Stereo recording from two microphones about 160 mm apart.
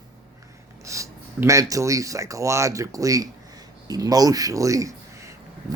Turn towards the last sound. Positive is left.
turn(degrees=-20)  # may be behind; listen again after turning